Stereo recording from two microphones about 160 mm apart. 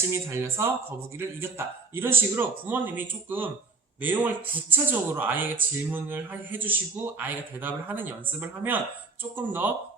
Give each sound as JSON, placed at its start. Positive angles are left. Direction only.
{"t": 0.1, "sound": "a man's voice", "side_deg": -15}